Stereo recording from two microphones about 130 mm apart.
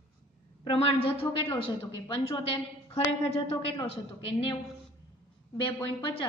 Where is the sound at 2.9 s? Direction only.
55° left (ahead or behind).